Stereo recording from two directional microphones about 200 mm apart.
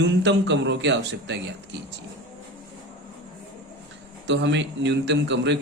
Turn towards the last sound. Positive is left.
turn(degrees=-60)  # may be behind; listen again after turning